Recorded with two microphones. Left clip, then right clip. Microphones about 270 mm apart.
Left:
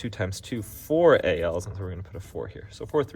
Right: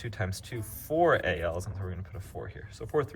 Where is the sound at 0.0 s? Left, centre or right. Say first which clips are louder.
Left 5 dB; left.